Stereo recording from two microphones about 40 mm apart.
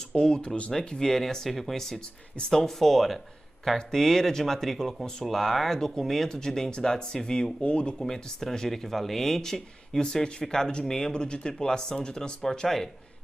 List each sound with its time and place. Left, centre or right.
0.1 s speech: left
2.3 s speech: left
2.6 s speech: centre; by 7.9 s left
8.0 s speech: centre